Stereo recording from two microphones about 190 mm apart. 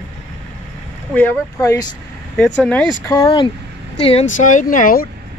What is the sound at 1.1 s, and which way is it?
Speech, 15° left (ahead or behind).